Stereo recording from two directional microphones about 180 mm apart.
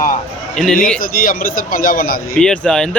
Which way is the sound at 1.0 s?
50° left (ahead or behind).